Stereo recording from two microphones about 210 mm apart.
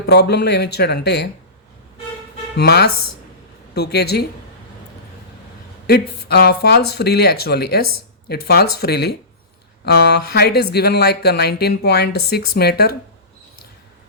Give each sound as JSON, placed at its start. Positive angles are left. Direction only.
{"t": 0.0, "sound": "speech", "side_deg": 50}
{"t": 2.6, "sound": "speech", "side_deg": 50}
{"t": 5.9, "sound": "speech", "side_deg": 50}